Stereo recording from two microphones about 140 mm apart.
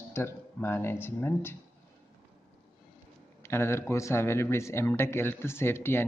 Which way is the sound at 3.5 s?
20° left (ahead or behind).